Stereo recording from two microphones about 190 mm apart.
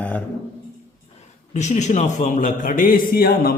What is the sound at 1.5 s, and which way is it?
A man's voice, 40° left (ahead or behind).